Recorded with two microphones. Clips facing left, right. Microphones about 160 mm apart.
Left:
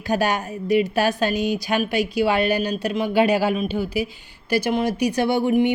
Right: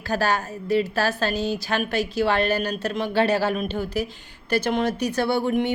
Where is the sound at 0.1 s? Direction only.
15° left (ahead or behind).